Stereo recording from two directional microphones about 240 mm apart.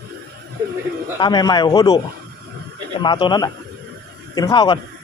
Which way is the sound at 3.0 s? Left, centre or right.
Centre.